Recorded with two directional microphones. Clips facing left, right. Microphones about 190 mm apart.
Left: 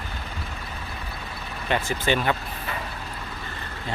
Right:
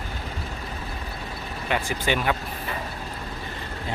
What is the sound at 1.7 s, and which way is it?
Speech, 10° right (ahead or behind).